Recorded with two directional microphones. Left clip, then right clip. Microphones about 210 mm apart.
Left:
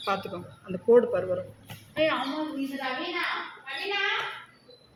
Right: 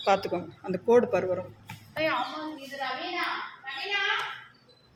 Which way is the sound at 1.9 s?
15° right (ahead or behind).